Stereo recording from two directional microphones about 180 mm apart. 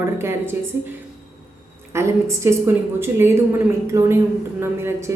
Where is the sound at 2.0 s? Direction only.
15° right (ahead or behind).